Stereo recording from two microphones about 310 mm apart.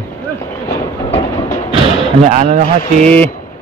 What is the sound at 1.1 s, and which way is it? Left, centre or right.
Train, centre.